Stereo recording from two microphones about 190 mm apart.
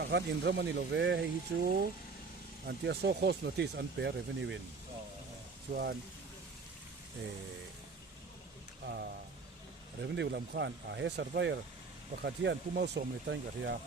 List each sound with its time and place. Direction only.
0.0 s speech: 60° right (ahead or behind)
5.7 s speech: 55° right (ahead or behind)
10.0 s speech: 60° right (ahead or behind)